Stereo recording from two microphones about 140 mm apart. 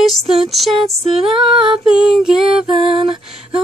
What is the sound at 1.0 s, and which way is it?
Humming, 40° right (ahead or behind).